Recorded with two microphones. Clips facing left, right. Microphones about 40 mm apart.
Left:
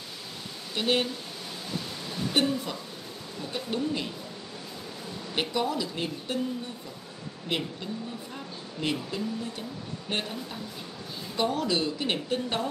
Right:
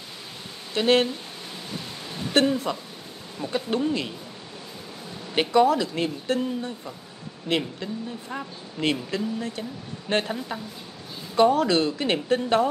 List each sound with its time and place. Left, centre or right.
0.7 s speech: right
2.4 s a woman's voice: right
3.5 s speech: right
5.3 s speech: right
7.4 s speech: right